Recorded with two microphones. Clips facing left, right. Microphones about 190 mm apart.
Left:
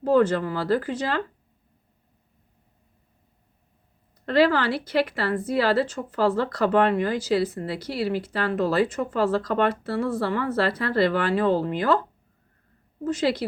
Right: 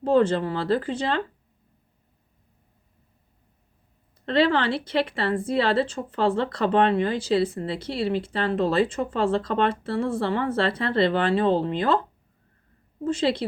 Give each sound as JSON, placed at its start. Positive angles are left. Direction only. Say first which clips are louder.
{"t": 0.0, "sound": "a woman's voice", "louder": "even", "side_deg": -30}
{"t": 4.3, "sound": "a woman's voice", "louder": "left 1 dB", "side_deg": -25}
{"t": 13.1, "sound": "a woman's voice", "louder": "even", "side_deg": -30}